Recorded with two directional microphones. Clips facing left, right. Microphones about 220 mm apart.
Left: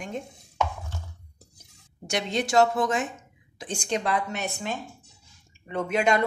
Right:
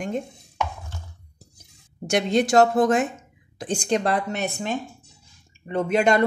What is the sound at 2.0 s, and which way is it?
A woman's voice, 50° right (ahead or behind).